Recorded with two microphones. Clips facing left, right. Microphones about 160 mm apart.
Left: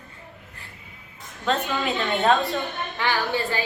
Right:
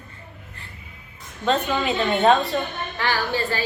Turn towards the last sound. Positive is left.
turn(degrees=20)  # may be behind; listen again after turning